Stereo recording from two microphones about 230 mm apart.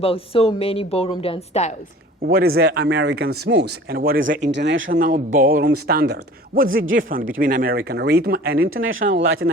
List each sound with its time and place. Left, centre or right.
0.0 s speech: left
2.2 s speech: right
8.7 s speech: right